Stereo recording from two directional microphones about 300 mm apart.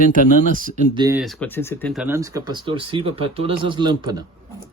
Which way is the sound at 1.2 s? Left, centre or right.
Centre.